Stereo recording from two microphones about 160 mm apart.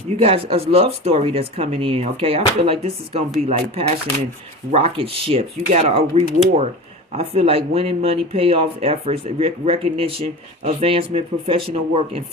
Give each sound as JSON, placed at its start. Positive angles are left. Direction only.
{"t": 0.2, "sound": "speech", "side_deg": -40}